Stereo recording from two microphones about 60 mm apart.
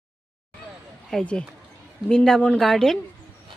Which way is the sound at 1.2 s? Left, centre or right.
Centre.